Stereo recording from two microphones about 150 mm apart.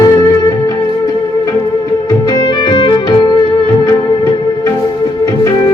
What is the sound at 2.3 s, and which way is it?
Music, 30° left (ahead or behind).